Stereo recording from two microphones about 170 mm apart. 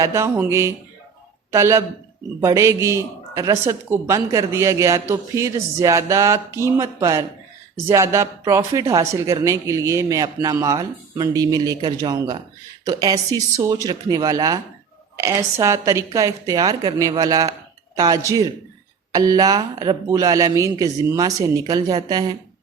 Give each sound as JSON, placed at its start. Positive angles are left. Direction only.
{"t": 0.0, "sound": "a man's voice", "side_deg": -15}